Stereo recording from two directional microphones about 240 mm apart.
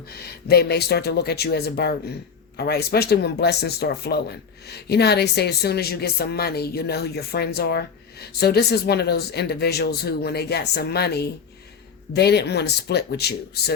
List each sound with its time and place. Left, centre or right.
0.1 s speech: left